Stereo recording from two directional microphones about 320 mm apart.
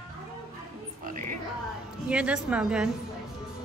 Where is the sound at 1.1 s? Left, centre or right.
Right.